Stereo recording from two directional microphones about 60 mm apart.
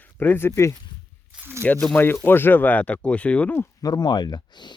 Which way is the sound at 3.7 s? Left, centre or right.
Left.